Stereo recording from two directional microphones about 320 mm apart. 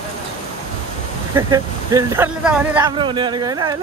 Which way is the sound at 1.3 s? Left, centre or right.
Centre.